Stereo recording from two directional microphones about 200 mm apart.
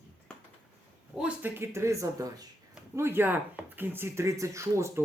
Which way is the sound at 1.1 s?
5° right (ahead or behind).